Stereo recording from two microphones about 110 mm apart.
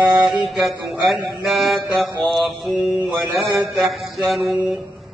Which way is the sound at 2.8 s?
20° right (ahead or behind).